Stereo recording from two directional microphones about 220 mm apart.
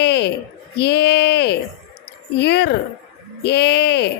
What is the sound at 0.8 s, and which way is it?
Speech, 50° left (ahead or behind).